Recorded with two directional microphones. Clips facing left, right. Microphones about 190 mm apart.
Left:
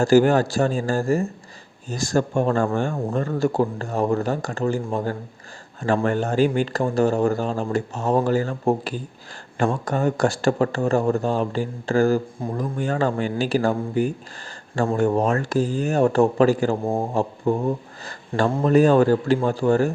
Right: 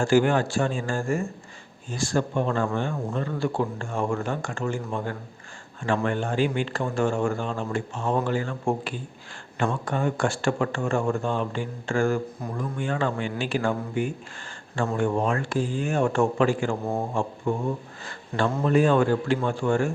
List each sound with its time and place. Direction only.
0.0 s speech: 40° left (ahead or behind)